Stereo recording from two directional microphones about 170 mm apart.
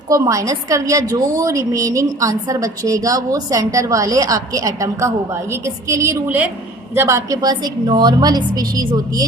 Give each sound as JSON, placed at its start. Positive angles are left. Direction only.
{"t": 0.1, "sound": "a woman's voice", "side_deg": -20}